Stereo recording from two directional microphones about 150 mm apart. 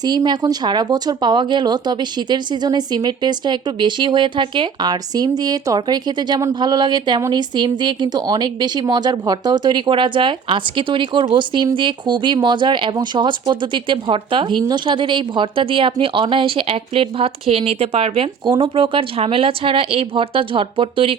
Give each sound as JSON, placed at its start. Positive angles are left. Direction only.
{"t": 0.0, "sound": "speech", "side_deg": -30}